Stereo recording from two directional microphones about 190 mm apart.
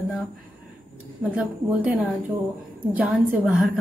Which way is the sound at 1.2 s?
10° right (ahead or behind).